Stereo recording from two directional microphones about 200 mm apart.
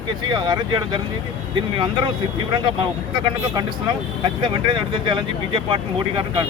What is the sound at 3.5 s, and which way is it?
Speech, 20° right (ahead or behind).